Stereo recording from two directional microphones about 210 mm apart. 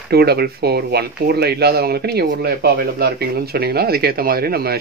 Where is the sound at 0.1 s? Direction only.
50° right (ahead or behind).